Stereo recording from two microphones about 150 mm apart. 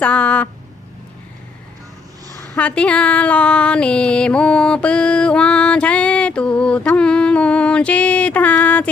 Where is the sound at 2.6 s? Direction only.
10° left (ahead or behind).